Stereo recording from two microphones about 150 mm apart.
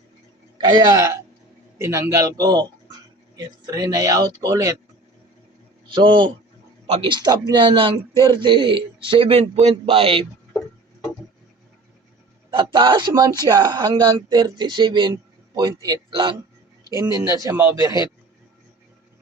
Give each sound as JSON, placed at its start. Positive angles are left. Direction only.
{"t": 0.6, "sound": "speech", "side_deg": -30}
{"t": 5.9, "sound": "speech", "side_deg": -30}
{"t": 6.8, "sound": "speech", "side_deg": -45}
{"t": 7.1, "sound": "speech", "side_deg": -30}
{"t": 12.5, "sound": "speech", "side_deg": -35}
{"t": 16.9, "sound": "speech", "side_deg": -25}
{"t": 17.5, "sound": "speech", "side_deg": -10}